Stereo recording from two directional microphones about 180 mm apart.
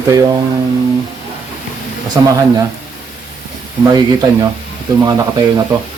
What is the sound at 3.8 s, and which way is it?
Speech, 20° right (ahead or behind).